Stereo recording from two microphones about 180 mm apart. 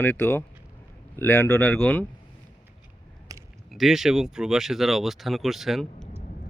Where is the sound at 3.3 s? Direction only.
20° right (ahead or behind).